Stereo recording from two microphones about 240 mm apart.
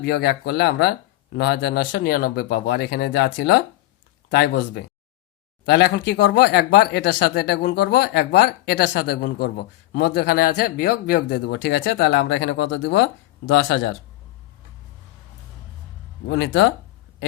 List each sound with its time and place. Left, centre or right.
0.0 s speech: left
16.3 s speech: left